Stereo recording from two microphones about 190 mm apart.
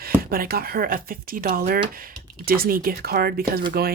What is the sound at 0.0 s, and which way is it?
Speech, 50° right (ahead or behind).